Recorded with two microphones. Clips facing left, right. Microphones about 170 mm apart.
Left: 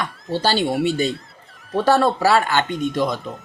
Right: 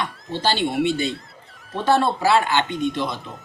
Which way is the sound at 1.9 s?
40° left (ahead or behind).